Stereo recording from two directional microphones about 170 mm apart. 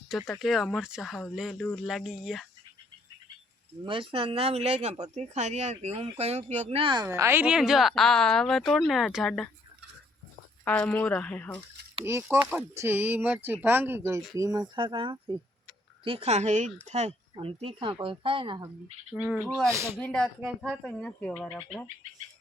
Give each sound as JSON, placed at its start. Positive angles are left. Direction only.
{"t": 0.1, "sound": "speech", "side_deg": 0}
{"t": 3.8, "sound": "speech", "side_deg": -30}
{"t": 10.7, "sound": "speech", "side_deg": 10}
{"t": 12.0, "sound": "speech", "side_deg": -15}
{"t": 19.1, "sound": "speech", "side_deg": -5}
{"t": 19.7, "sound": "speech", "side_deg": -15}
{"t": 20.0, "sound": "speech", "side_deg": 5}